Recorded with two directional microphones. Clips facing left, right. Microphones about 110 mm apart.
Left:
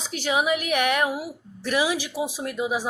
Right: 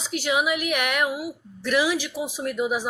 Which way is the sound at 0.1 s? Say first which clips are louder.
Even; 35° left (ahead or behind).